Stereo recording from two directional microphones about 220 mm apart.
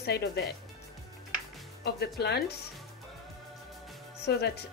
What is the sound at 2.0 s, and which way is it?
Speech, 45° left (ahead or behind).